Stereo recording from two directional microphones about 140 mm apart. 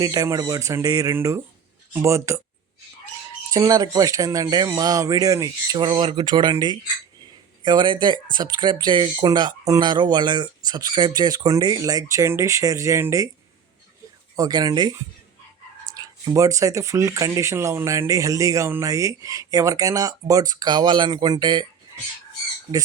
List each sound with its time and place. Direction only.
0.0 s speech: 25° right (ahead or behind)
3.5 s speech: 25° right (ahead or behind)
14.3 s speech: 25° right (ahead or behind)
16.0 s speech: 25° right (ahead or behind)